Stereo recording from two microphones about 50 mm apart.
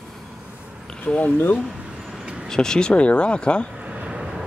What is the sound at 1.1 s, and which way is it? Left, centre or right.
Speech, left.